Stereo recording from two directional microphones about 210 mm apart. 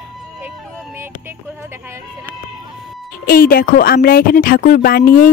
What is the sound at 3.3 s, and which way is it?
A woman's voice, 45° left (ahead or behind).